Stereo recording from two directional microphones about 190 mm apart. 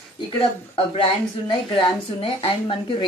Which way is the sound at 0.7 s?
30° left (ahead or behind).